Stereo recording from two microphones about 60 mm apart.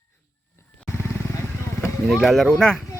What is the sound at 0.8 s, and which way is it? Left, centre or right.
Vehicle, left.